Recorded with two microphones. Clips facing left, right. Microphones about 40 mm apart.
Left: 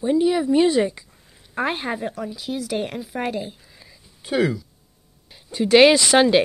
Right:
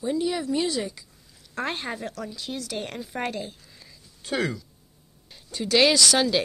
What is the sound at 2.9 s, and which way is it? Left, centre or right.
Speech, centre.